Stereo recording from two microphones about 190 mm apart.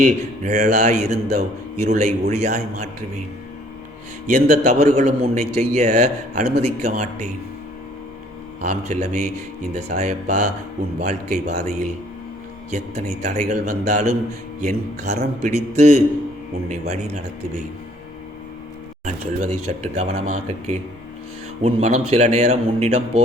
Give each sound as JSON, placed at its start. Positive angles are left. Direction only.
{"t": 0.0, "sound": "a man's voice", "side_deg": -40}
{"t": 4.3, "sound": "a man's voice", "side_deg": -40}
{"t": 8.6, "sound": "a man's voice", "side_deg": -40}
{"t": 19.0, "sound": "a man's voice", "side_deg": -35}